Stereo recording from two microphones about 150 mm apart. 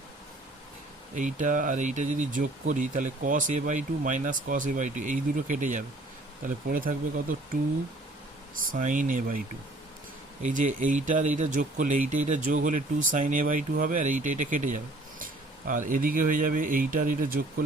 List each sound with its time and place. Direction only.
1.1 s speech: 55° right (ahead or behind)
6.7 s speech: 65° right (ahead or behind)
8.7 s speech: 60° right (ahead or behind)
10.4 s speech: 55° right (ahead or behind)